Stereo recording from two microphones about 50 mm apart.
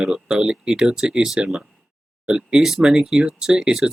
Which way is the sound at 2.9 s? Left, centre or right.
Centre.